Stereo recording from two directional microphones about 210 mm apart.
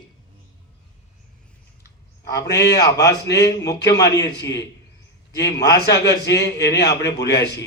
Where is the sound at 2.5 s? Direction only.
15° left (ahead or behind).